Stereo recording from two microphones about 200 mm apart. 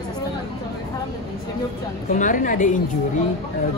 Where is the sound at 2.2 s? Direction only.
40° left (ahead or behind).